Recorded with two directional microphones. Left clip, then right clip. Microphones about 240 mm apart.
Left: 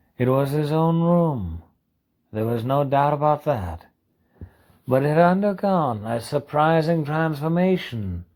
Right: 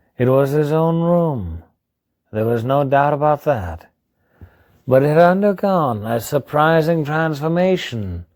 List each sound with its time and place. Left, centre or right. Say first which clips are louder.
0.2 s speech: right 6 dB; right